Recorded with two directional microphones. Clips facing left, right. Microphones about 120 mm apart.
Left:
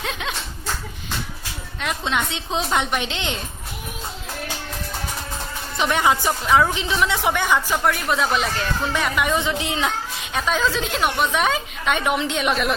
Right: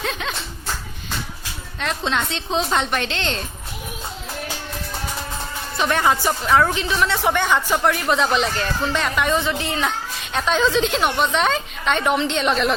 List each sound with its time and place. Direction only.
0.0 s a sound: 15° left (ahead or behind)
1.8 s a woman's voice: 10° left (ahead or behind)
5.7 s a woman's voice: 15° left (ahead or behind)
10.3 s a woman's voice: 5° left (ahead or behind)